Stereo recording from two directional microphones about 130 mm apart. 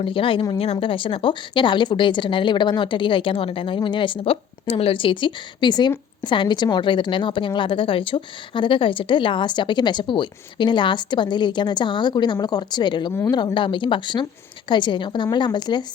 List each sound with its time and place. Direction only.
0.0 s a woman's voice: 40° left (ahead or behind)